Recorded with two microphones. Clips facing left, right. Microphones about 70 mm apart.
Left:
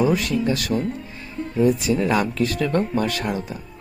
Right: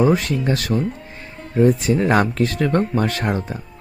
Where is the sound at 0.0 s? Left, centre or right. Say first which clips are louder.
Right 2 dB; right.